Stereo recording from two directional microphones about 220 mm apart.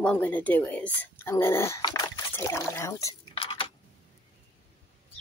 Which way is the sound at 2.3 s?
10° left (ahead or behind).